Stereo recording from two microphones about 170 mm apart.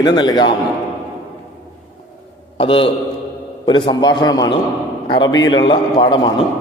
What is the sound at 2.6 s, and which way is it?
A man's voice, 30° left (ahead or behind).